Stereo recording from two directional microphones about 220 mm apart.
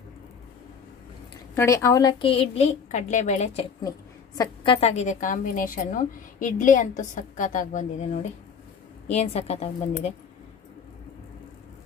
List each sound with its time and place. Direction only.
1.5 s a woman's voice: 10° left (ahead or behind); by 10.1 s 30° left (ahead or behind)